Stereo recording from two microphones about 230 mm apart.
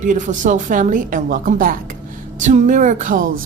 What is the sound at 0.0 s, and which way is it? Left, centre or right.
Speech, right.